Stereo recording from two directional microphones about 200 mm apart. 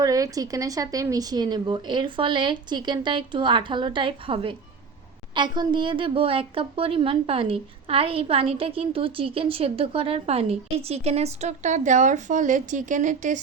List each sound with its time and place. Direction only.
0.0 s a woman's voice: 15° right (ahead or behind); by 13.4 s 40° right (ahead or behind)